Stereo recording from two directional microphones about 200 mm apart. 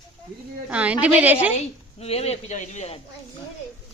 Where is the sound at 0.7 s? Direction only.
5° right (ahead or behind).